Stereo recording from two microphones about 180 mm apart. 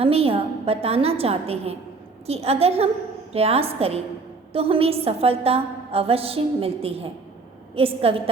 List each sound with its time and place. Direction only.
0.0 s a woman's voice: 30° right (ahead or behind)